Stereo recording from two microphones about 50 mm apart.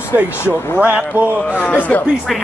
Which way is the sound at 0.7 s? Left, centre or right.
Right.